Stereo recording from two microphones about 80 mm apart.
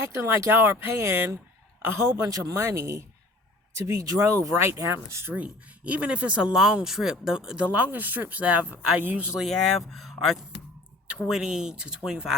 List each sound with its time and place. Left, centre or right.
0.1 s speech: right
5.3 s speech: centre
9.4 s speech: centre